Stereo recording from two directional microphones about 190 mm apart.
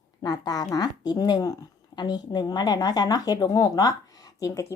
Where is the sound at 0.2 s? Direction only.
20° left (ahead or behind).